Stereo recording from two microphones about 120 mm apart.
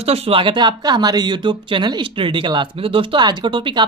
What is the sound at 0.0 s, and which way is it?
Speech, 55° right (ahead or behind).